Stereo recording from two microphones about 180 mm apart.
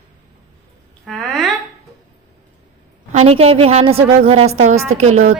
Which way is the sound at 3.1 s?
35° right (ahead or behind).